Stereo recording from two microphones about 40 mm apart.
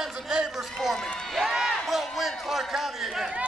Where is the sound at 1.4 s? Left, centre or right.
Centre.